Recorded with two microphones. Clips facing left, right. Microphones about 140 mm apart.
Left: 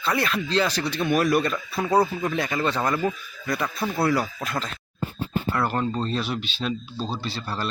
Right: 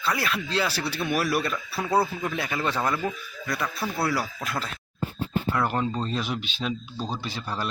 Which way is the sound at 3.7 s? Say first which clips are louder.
Left 3 dB; 20° left (ahead or behind).